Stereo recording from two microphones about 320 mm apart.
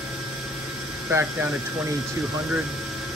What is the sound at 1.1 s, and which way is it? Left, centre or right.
Speech, centre.